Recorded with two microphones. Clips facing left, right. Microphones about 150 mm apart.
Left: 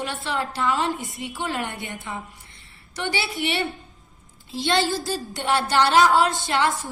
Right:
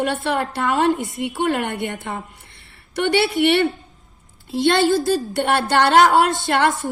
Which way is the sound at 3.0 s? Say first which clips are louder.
Right 10 dB; 70° right (ahead or behind).